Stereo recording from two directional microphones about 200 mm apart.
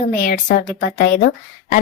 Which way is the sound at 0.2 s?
40° left (ahead or behind).